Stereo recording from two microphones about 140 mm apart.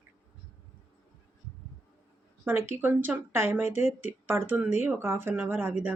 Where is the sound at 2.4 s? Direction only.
15° right (ahead or behind).